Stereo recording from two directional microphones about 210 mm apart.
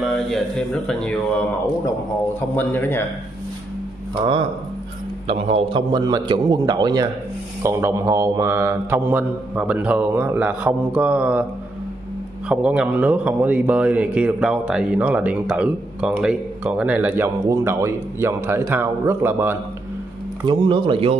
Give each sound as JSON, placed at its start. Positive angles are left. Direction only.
{"t": 0.0, "sound": "a man's voice", "side_deg": 0}
{"t": 2.5, "sound": "a man's voice", "side_deg": 10}
{"t": 5.2, "sound": "a man's voice", "side_deg": -25}
{"t": 12.4, "sound": "a man's voice", "side_deg": -5}
{"t": 20.4, "sound": "a man's voice", "side_deg": -20}